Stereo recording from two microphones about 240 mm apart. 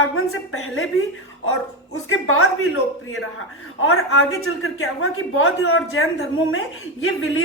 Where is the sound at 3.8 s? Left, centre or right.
Left.